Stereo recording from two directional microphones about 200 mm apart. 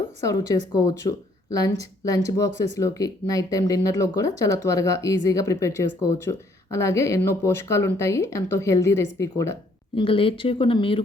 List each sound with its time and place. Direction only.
0.2 s speech: 15° left (ahead or behind)
9.9 s speech: 25° left (ahead or behind)